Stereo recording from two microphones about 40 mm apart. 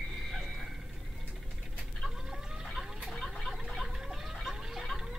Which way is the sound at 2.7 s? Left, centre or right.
Centre.